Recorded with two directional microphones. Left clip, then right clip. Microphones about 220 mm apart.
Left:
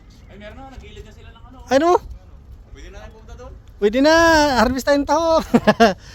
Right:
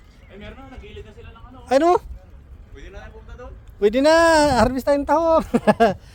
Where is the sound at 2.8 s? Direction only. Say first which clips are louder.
Even; 50° left (ahead or behind).